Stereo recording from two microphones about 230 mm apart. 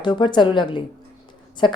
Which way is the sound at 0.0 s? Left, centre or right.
Centre.